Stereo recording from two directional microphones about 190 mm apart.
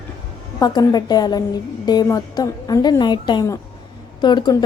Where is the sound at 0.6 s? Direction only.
20° left (ahead or behind).